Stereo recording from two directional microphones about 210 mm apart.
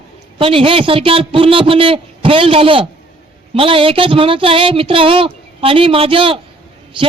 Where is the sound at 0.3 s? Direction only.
25° right (ahead or behind).